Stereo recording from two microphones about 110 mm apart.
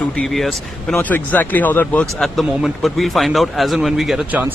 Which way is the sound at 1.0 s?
15° left (ahead or behind).